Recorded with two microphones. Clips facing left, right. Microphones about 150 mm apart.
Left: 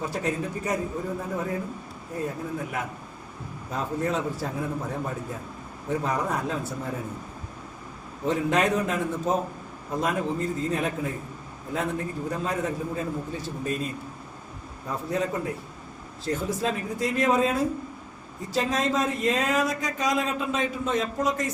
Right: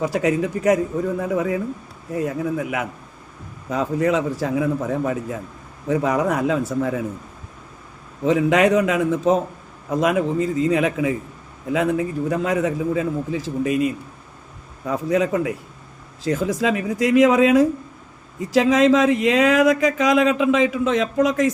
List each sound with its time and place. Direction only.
0.0 s speech: 90° right
8.3 s speech: 90° right